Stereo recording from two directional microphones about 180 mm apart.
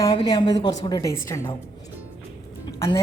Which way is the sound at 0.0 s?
25° left (ahead or behind).